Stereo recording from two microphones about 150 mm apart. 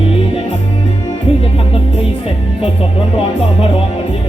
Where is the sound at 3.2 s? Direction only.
40° left (ahead or behind).